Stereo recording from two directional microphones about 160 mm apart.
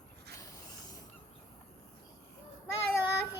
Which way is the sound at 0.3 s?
20° left (ahead or behind).